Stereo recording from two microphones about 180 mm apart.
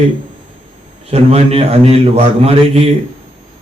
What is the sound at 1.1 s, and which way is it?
A man's voice, 35° right (ahead or behind).